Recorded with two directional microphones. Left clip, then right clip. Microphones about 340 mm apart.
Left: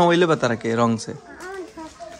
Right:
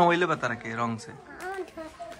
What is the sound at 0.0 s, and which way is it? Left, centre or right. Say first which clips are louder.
Speech: left 6 dB; centre.